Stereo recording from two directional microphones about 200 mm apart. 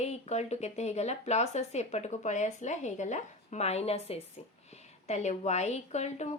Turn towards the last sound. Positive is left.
turn(degrees=35)  # may be behind; listen again after turning